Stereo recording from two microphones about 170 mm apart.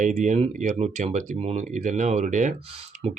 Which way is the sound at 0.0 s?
45° right (ahead or behind).